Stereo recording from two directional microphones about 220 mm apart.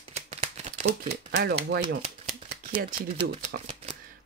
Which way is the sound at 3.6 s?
25° right (ahead or behind).